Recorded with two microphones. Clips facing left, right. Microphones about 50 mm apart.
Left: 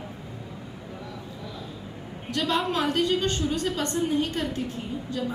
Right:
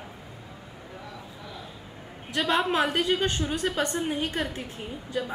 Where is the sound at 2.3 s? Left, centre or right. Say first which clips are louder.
Right 1 dB; centre.